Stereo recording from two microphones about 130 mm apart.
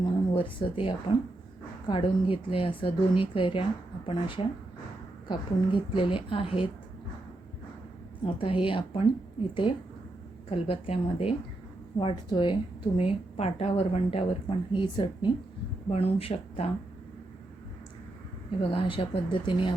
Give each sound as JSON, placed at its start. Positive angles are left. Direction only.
{"t": 0.0, "sound": "a woman's voice", "side_deg": 40}
{"t": 8.2, "sound": "a woman's voice", "side_deg": 45}
{"t": 10.5, "sound": "a woman's voice", "side_deg": 45}
{"t": 11.9, "sound": "a woman's voice", "side_deg": 40}
{"t": 14.7, "sound": "a woman's voice", "side_deg": 35}
{"t": 15.9, "sound": "a woman's voice", "side_deg": 50}
{"t": 18.6, "sound": "a woman's voice", "side_deg": 45}